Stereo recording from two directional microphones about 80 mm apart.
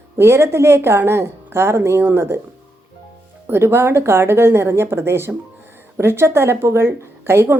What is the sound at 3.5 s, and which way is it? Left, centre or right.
A woman's voice, right.